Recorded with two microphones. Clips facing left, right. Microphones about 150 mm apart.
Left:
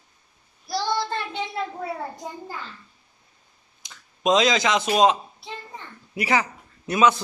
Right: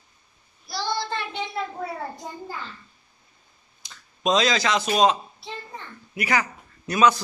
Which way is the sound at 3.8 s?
20° left (ahead or behind).